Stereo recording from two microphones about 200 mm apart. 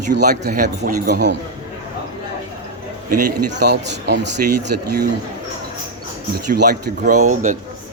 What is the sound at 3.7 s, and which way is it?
Speech, 60° right (ahead or behind).